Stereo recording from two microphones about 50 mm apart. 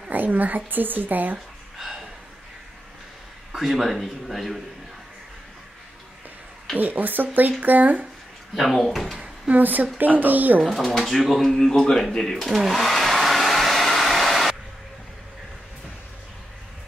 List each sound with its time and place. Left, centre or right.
0.1 s a woman's voice: right
3.5 s speech: centre
6.8 s a woman's voice: right
8.5 s speech: centre
9.5 s a woman's voice: right
10.6 s speech: centre
12.4 s hair dryer: centre